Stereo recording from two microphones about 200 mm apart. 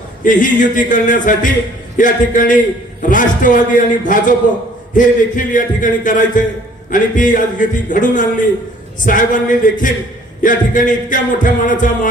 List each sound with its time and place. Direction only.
0.3 s a man's voice: 40° left (ahead or behind)